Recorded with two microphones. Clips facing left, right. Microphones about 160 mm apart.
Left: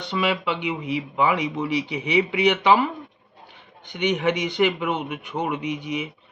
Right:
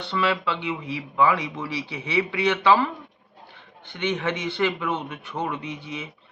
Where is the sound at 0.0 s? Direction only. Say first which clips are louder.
Left 1 dB; 15° left (ahead or behind).